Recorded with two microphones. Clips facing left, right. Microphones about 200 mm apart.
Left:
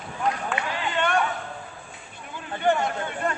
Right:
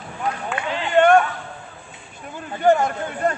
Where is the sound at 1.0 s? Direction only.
50° right (ahead or behind).